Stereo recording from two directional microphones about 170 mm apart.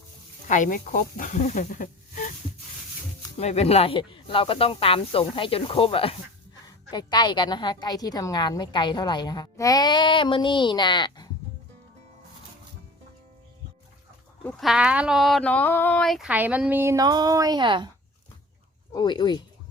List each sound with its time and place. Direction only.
0.4 s speech: 50° left (ahead or behind)
3.3 s a woman's voice: 40° left (ahead or behind)
14.6 s speech: 5° right (ahead or behind); by 17.8 s 25° right (ahead or behind)
18.9 s a woman's voice: 25° left (ahead or behind)